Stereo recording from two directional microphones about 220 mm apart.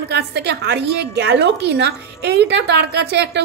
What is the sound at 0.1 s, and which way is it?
A woman's voice, 50° right (ahead or behind).